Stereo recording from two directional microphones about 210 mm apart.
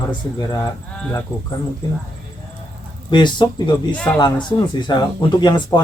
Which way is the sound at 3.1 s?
20° left (ahead or behind).